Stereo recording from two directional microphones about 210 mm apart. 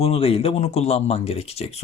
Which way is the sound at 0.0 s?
25° left (ahead or behind).